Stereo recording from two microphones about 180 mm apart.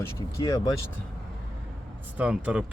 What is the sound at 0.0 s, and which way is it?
Speech, 20° left (ahead or behind).